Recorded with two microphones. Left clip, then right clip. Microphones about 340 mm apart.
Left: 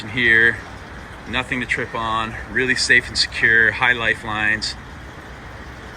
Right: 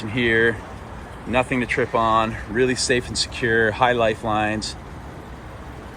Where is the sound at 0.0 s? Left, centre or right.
Centre.